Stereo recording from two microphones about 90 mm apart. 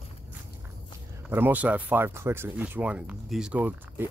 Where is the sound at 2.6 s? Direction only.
15° right (ahead or behind).